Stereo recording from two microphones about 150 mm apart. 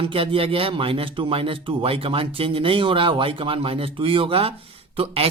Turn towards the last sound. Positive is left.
turn(degrees=-40)  # may be behind; listen again after turning